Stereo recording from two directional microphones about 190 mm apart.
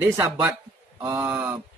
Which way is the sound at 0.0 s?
10° right (ahead or behind).